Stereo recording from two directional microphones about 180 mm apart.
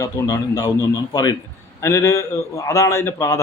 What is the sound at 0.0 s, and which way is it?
Speech, 20° left (ahead or behind).